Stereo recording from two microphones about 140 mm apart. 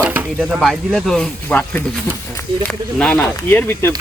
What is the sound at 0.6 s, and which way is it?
Speech, centre (ahead or behind).